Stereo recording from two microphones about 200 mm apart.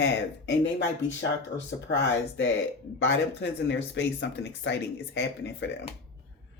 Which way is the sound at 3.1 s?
60° left (ahead or behind).